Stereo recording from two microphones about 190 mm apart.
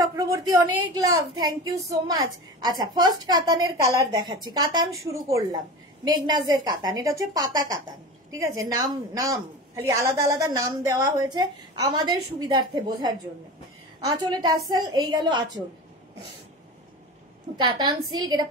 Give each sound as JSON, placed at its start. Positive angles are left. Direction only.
{"t": 0.0, "sound": "a woman's voice", "side_deg": -15}
{"t": 17.6, "sound": "a woman's voice", "side_deg": -25}